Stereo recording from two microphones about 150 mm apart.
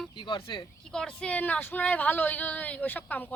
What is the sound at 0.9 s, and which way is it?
Speech, 5° left (ahead or behind).